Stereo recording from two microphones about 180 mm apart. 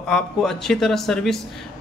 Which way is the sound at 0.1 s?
Centre (ahead or behind).